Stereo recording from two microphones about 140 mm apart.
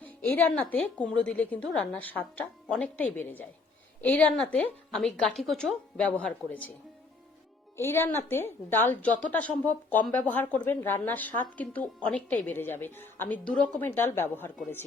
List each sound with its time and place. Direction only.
0.0 s a woman's voice: 10° left (ahead or behind)
7.8 s a woman's voice: 15° left (ahead or behind)